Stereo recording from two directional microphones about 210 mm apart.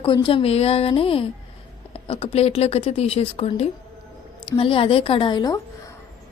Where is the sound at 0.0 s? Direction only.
25° left (ahead or behind).